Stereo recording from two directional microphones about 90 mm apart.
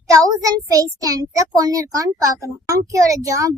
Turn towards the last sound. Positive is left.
turn(degrees=-40)  # may be behind; listen again after turning